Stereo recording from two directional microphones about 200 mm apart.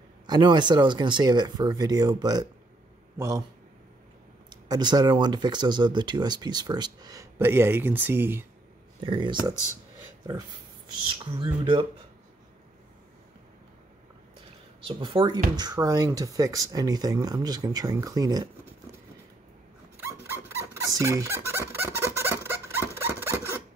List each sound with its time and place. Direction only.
0.3 s a man's voice: 20° right (ahead or behind)
4.5 s speech: 20° right (ahead or behind)
9.0 s speech: 25° right (ahead or behind)
14.9 s speech: 25° right (ahead or behind)
20.0 s fowl: 10° right (ahead or behind)